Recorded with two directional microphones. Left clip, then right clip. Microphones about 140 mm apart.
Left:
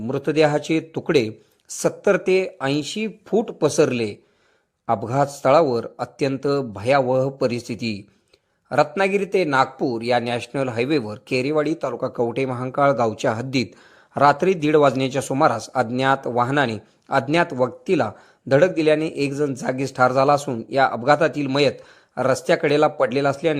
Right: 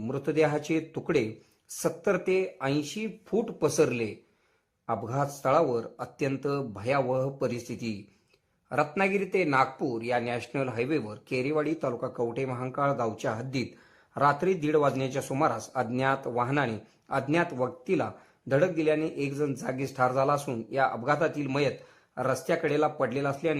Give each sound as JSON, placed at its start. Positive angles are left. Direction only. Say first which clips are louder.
{"t": 0.1, "sound": "a man's voice", "louder": "left 8 dB", "side_deg": 30}